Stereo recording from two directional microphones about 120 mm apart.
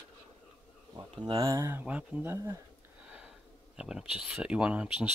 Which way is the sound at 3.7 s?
5° right (ahead or behind).